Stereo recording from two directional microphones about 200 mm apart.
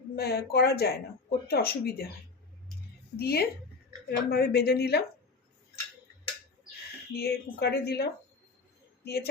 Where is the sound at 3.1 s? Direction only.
50° left (ahead or behind).